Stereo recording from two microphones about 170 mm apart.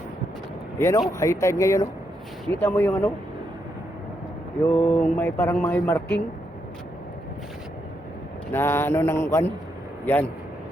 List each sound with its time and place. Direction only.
0.8 s mantra: 15° left (ahead or behind)
4.6 s mantra: 10° left (ahead or behind)
8.5 s mantra: 15° left (ahead or behind)